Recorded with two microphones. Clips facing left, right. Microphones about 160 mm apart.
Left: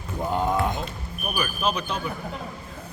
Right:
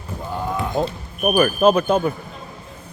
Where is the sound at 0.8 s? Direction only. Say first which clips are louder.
Right 11 dB; 40° right (ahead or behind).